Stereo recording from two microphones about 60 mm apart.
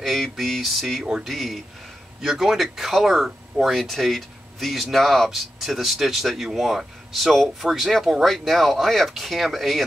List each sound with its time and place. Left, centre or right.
0.0 s speech: centre